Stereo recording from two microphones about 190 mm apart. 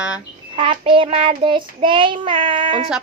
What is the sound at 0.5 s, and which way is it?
A child's voice, 30° right (ahead or behind).